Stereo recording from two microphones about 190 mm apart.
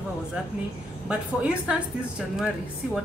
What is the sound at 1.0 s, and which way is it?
A woman's voice, 5° right (ahead or behind).